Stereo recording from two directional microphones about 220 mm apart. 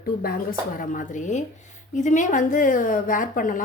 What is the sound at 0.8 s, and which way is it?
A woman's voice, 35° left (ahead or behind).